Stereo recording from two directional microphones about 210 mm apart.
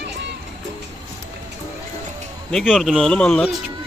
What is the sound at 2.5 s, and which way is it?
A man's voice, centre (ahead or behind).